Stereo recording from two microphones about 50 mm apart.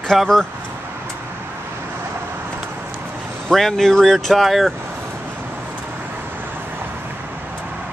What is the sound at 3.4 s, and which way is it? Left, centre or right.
Speech, centre.